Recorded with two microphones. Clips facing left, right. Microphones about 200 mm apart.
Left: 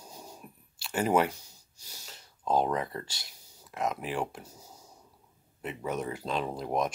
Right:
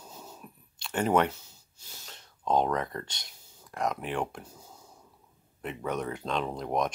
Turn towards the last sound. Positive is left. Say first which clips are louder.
# right 1 dB
turn(degrees=5)  # may be behind; listen again after turning